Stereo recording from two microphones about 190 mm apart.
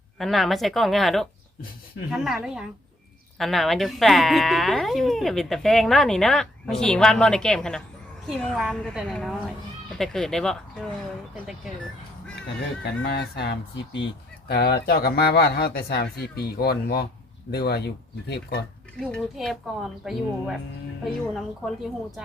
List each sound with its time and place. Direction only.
0.2 s speech: centre (ahead or behind)
13.0 s speech: 60° left (ahead or behind)
14.8 s speech: 55° left (ahead or behind)
18.9 s speech: 5° left (ahead or behind)